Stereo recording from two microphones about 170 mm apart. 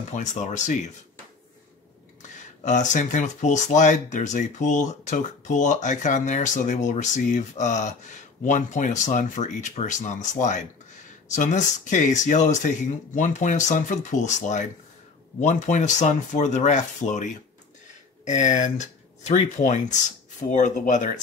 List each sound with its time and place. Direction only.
0.1 s speech: 45° left (ahead or behind)
2.6 s speech: 45° left (ahead or behind)